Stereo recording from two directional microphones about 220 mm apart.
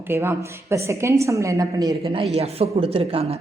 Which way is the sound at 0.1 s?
10° right (ahead or behind).